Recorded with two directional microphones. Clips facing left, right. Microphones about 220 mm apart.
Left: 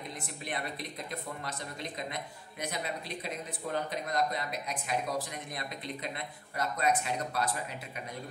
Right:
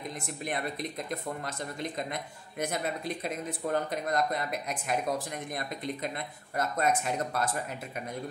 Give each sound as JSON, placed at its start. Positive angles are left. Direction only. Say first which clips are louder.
{"t": 3.7, "sound": "speech", "louder": "right 3 dB", "side_deg": -50}
{"t": 6.5, "sound": "speech", "louder": "right 2 dB", "side_deg": -45}